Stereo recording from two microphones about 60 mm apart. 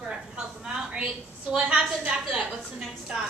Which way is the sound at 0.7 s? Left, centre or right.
Centre.